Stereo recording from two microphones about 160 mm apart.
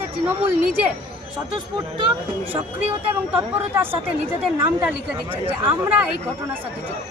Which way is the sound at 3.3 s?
15° right (ahead or behind).